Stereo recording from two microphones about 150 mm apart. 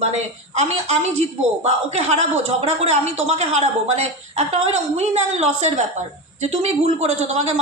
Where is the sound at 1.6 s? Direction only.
45° right (ahead or behind).